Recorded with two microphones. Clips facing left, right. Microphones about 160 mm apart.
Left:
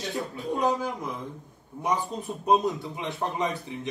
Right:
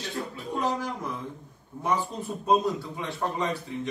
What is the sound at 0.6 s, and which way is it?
A man's voice, 15° left (ahead or behind).